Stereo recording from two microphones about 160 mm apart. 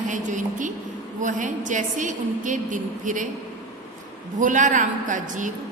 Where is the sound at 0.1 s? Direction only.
50° right (ahead or behind).